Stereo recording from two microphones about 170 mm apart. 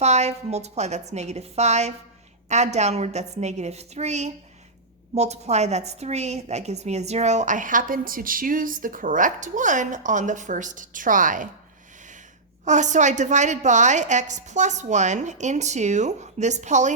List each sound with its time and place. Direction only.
0.0 s a woman's voice: 40° right (ahead or behind)
12.6 s a woman's voice: 45° right (ahead or behind)